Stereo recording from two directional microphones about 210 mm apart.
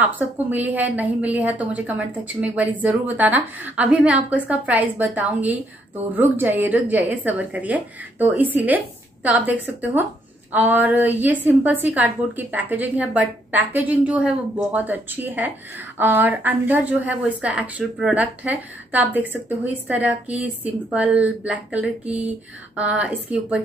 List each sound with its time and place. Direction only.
0.0 s a woman's voice: 10° right (ahead or behind)